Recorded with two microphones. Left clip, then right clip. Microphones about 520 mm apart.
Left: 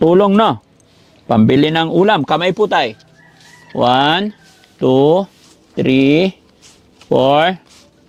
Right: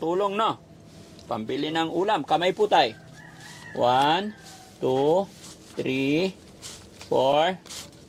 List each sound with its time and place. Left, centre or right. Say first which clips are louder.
0.0 s speech: left 13 dB; left